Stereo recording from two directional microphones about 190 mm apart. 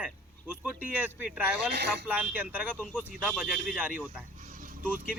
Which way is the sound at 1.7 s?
60° right (ahead or behind).